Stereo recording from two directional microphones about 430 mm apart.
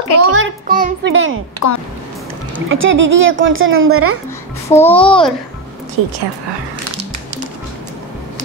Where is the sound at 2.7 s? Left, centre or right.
Right.